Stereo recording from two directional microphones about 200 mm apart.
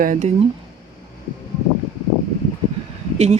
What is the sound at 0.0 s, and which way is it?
Speech, 40° right (ahead or behind).